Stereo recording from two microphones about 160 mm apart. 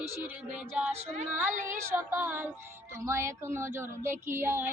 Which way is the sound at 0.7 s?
10° right (ahead or behind).